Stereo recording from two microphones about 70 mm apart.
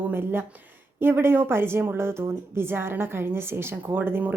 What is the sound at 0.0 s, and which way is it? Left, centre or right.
Speech, right.